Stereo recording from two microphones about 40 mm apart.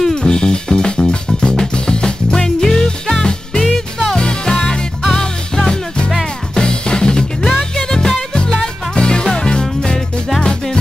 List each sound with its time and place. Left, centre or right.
0.1 s music: centre